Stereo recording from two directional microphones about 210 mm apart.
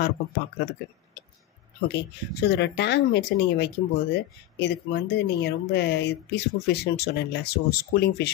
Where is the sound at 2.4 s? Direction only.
55° left (ahead or behind).